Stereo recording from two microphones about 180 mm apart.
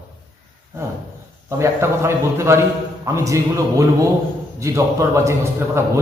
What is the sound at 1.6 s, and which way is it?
A man's voice, 15° right (ahead or behind).